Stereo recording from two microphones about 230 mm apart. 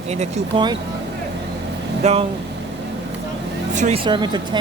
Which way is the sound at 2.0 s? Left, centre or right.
Right.